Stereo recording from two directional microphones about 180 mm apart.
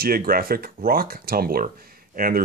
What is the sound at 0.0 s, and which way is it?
Speech, 55° right (ahead or behind).